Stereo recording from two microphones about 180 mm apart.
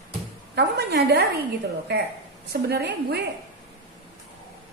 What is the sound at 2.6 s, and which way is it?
Speech, 65° right (ahead or behind).